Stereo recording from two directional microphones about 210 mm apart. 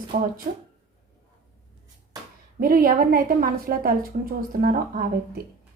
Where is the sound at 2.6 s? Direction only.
45° right (ahead or behind).